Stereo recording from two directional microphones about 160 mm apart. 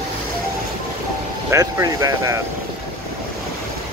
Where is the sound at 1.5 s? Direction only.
20° right (ahead or behind).